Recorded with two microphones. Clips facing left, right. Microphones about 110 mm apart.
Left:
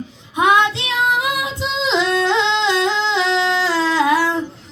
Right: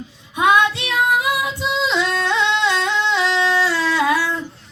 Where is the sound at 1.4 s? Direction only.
20° left (ahead or behind).